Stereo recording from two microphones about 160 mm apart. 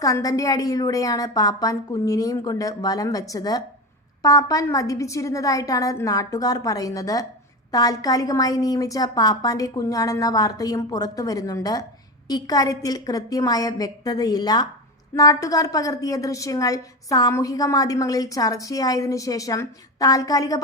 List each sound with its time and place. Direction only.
0.0 s a woman's voice: 20° left (ahead or behind)